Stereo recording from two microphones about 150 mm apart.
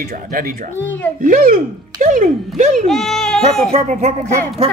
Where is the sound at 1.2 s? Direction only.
65° right (ahead or behind).